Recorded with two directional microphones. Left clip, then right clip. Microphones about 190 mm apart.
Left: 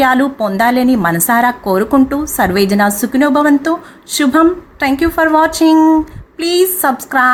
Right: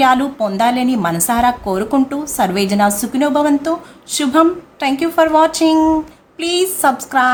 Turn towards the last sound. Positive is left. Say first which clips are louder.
# left 1 dB
turn(degrees=15)  # may be behind; listen again after turning